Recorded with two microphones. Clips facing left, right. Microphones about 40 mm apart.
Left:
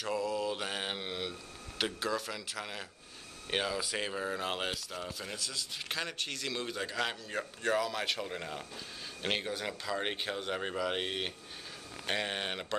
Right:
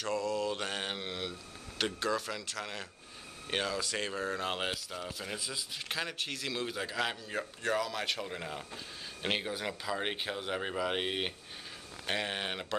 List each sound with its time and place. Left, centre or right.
0.0 s mantra: centre
1.8 s a man's voice: centre
5.3 s speech: centre
5.9 s a man's voice: centre